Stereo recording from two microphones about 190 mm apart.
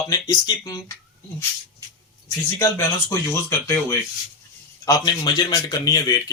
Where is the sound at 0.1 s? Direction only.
20° left (ahead or behind).